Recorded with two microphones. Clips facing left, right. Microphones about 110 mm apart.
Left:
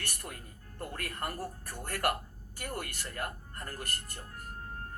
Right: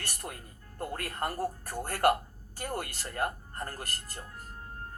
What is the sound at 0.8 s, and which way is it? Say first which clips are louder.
Speech: right 4 dB; 35° right (ahead or behind).